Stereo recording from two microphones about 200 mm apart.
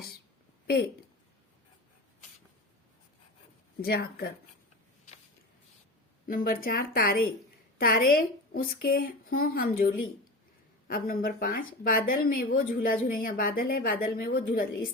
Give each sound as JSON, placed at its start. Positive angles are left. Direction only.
{"t": 3.8, "sound": "speech", "side_deg": 50}
{"t": 6.2, "sound": "speech", "side_deg": 45}